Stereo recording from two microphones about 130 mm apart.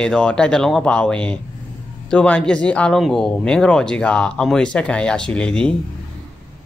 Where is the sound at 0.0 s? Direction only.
5° left (ahead or behind).